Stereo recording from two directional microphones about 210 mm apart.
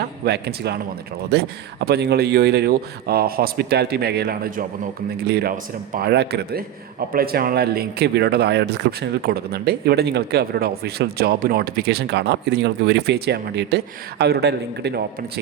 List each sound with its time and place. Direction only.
0.0 s a man's voice: 50° right (ahead or behind)